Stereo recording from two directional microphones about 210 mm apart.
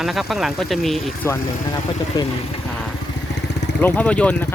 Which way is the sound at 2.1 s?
20° left (ahead or behind).